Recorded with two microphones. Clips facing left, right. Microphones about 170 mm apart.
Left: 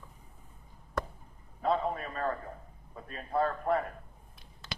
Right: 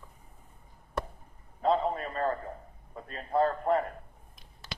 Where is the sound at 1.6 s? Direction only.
25° right (ahead or behind).